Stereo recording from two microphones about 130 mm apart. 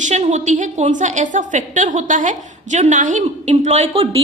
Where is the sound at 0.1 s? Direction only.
60° right (ahead or behind).